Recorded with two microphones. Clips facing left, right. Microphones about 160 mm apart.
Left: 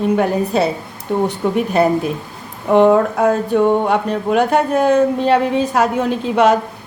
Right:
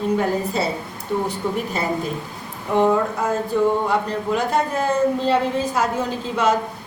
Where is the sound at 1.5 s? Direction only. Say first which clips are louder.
Left 9 dB; 65° left (ahead or behind).